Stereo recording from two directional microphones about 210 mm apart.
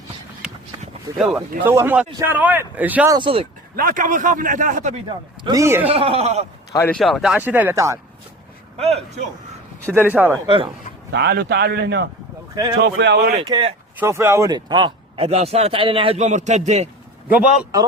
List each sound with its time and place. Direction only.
0.4 s a sound: 5° right (ahead or behind)
1.4 s speech: 10° right (ahead or behind)
3.2 s a man's voice: 25° right (ahead or behind)
3.8 s a man's voice: 40° right (ahead or behind)
5.0 s speech: 20° right (ahead or behind)
5.9 s a man's voice: 25° right (ahead or behind)
6.7 s speech: 5° left (ahead or behind); by 7.9 s 15° right (ahead or behind)
8.8 s a man's voice: 30° right (ahead or behind)
9.9 s speech: 10° right (ahead or behind)
10.4 s a man's voice: 25° right (ahead or behind)
11.1 s a man's voice: 50° right (ahead or behind)
13.4 s a man's voice: 20° right (ahead or behind)
14.0 s a man's voice: 10° right (ahead or behind); by 16.9 s 35° right (ahead or behind)
17.2 s speech: 5° right (ahead or behind)